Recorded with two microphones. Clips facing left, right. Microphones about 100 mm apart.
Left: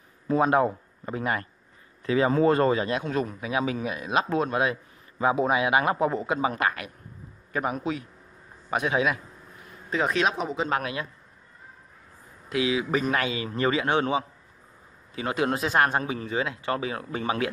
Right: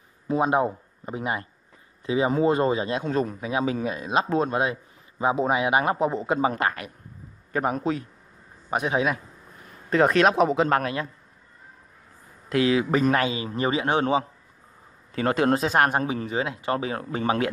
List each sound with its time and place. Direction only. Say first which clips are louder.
0.3 s a man's voice: left 1 dB; 20° right (ahead or behind)
6.3 s speech: right 2 dB; 35° right (ahead or behind)
8.6 s a man's voice: right 1 dB; 25° right (ahead or behind)
9.8 s speech: right 6 dB; 55° right (ahead or behind)
10.8 s speech: right 4 dB; 40° right (ahead or behind)
12.4 s a man's voice: right 4 dB; 50° right (ahead or behind); by 14.2 s 30° right (ahead or behind)
15.3 s speech: right 3 dB; 35° right (ahead or behind)
15.7 s a man's voice: right 2 dB; 20° right (ahead or behind)
16.0 s speech: right 4 dB; 35° right (ahead or behind)
16.3 s speech: right 2 dB; 25° right (ahead or behind)